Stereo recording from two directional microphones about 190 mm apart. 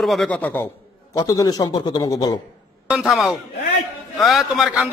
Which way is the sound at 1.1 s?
20° left (ahead or behind).